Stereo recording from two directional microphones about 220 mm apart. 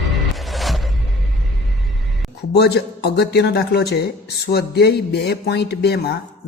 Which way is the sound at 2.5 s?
50° left (ahead or behind).